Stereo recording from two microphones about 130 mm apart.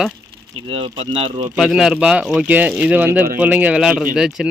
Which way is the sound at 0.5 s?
45° right (ahead or behind).